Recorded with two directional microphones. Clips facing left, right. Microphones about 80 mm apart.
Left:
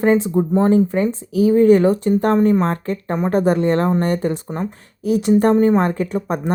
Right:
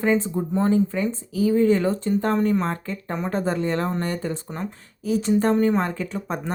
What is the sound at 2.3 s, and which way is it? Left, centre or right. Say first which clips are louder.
Speech: left 7 dB; left.